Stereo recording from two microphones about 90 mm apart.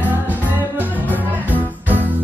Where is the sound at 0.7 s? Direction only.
20° right (ahead or behind).